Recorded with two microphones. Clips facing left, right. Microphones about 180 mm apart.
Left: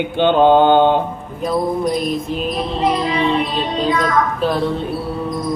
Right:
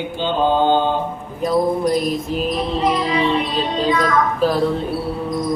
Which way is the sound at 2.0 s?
Centre (ahead or behind).